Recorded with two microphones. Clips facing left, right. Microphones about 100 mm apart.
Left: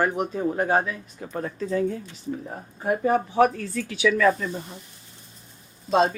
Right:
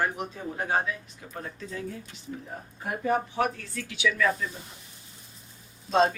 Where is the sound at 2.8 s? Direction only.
35° left (ahead or behind).